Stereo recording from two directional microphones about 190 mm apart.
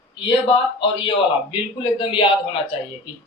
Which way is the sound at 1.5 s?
25° left (ahead or behind).